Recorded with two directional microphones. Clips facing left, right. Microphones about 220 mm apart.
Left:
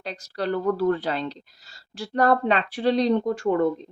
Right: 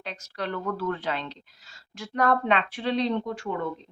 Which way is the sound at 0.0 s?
35° left (ahead or behind).